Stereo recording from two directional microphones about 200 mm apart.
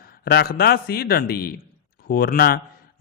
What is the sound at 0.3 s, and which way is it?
A man's voice, 50° left (ahead or behind).